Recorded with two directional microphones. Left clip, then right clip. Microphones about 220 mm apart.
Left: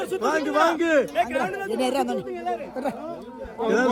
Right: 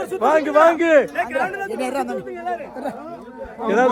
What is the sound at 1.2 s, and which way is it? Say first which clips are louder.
Speech: right 2 dB; 45° left (ahead or behind).